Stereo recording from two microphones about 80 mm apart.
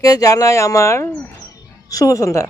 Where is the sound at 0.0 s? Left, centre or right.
Left.